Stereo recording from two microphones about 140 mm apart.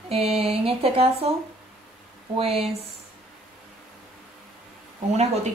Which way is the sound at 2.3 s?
45° right (ahead or behind).